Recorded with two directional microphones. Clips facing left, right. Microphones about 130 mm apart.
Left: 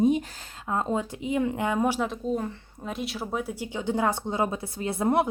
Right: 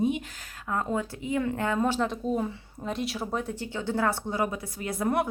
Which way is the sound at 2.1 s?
5° right (ahead or behind).